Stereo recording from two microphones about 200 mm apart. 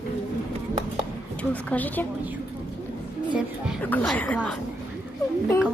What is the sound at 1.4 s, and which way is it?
Speech, 10° left (ahead or behind).